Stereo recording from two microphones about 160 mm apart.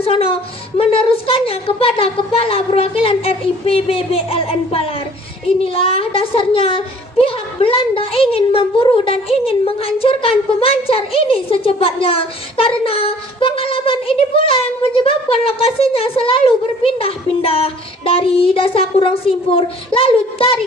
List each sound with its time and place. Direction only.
0.0 s a woman's voice: 35° left (ahead or behind)